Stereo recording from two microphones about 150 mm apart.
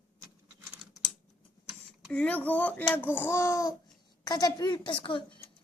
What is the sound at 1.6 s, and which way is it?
A child's voice, 5° left (ahead or behind).